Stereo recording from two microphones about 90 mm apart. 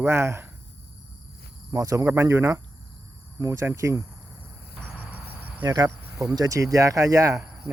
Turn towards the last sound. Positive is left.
turn(degrees=-40)  # may be behind; listen again after turning